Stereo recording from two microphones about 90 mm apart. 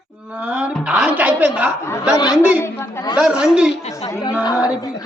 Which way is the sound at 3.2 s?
10° right (ahead or behind).